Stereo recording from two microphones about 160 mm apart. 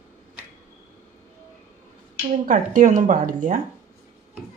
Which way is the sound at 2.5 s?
55° right (ahead or behind).